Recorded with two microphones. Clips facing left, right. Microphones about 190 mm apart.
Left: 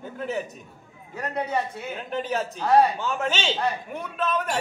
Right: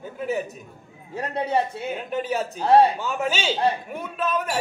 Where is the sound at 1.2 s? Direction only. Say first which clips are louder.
Right 2 dB; 30° right (ahead or behind).